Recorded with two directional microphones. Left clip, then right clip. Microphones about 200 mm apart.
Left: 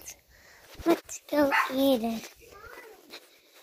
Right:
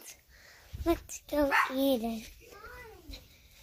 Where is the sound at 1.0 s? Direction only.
20° left (ahead or behind).